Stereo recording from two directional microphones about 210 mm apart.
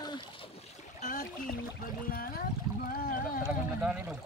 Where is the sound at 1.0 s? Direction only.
40° left (ahead or behind).